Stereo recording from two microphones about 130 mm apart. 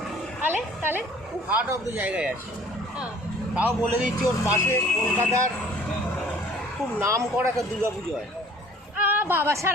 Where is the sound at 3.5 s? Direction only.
10° right (ahead or behind).